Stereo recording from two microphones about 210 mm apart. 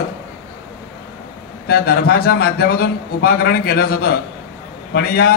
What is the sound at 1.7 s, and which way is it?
A man's voice, 50° left (ahead or behind).